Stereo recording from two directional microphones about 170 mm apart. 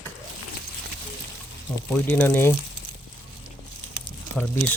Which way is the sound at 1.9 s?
10° left (ahead or behind).